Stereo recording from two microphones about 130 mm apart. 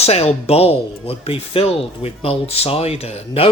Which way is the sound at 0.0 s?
55° left (ahead or behind).